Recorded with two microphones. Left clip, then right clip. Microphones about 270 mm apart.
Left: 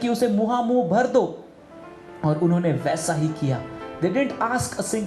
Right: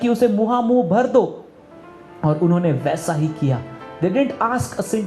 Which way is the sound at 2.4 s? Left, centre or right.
Right.